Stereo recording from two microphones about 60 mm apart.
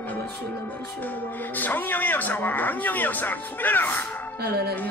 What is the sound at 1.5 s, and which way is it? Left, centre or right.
Speech, left.